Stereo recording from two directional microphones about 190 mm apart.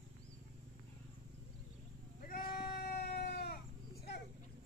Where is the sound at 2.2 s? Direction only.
45° left (ahead or behind).